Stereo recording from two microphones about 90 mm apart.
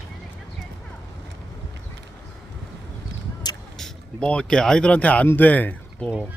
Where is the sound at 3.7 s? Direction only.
5° left (ahead or behind).